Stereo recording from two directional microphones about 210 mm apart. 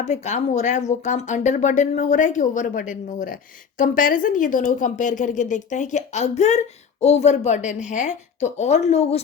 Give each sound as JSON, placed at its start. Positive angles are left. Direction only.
{"t": 0.0, "sound": "speech", "side_deg": 35}